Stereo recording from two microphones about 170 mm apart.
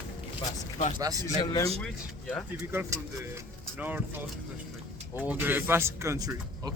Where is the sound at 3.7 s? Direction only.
10° right (ahead or behind).